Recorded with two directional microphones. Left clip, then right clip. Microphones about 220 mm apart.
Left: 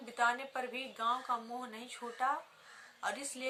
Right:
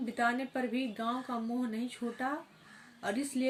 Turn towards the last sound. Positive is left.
turn(degrees=15)  # may be behind; listen again after turning